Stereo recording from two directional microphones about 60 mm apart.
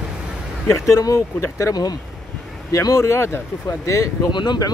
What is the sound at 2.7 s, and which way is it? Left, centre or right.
Speech, left.